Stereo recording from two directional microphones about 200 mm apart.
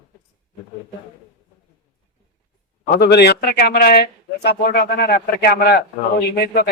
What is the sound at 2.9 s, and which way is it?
Speech, 55° left (ahead or behind).